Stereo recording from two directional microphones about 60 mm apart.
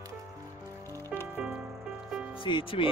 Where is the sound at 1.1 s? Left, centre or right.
Centre.